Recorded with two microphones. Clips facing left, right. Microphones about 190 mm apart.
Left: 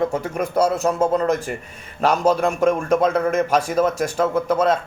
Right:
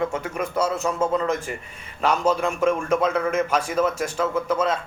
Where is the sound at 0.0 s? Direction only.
40° left (ahead or behind).